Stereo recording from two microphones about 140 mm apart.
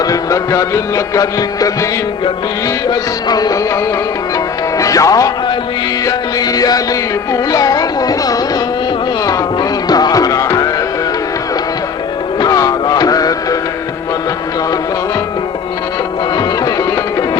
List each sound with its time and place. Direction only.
0.0 s music: 25° left (ahead or behind)
4.8 s speech: 25° left (ahead or behind)
6.1 s music: 25° left (ahead or behind)
12.4 s music: 25° left (ahead or behind)